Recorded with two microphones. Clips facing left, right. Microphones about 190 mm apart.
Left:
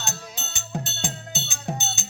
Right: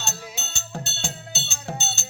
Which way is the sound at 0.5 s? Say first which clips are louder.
Left 7 dB; 15° left (ahead or behind).